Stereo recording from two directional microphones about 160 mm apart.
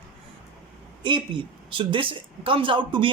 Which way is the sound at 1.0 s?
30° right (ahead or behind).